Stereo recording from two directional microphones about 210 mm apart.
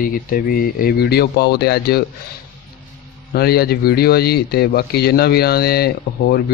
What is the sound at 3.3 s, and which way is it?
A man's voice, 50° left (ahead or behind).